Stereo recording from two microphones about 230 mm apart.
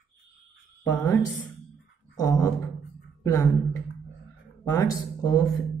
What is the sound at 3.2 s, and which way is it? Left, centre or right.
Speech, centre.